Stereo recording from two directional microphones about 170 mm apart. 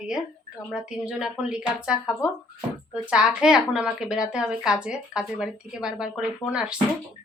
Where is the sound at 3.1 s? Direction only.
5° right (ahead or behind).